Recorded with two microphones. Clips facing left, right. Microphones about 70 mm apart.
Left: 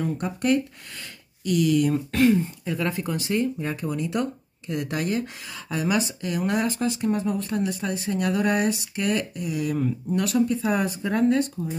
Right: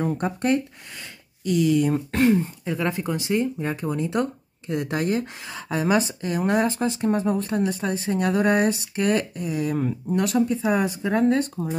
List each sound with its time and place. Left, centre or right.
0.0 s speech: right; by 3.4 s centre
3.6 s speech: right
11.2 s speech: right